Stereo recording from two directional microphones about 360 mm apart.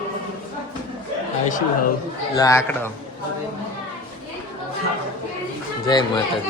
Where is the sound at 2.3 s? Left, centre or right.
Centre.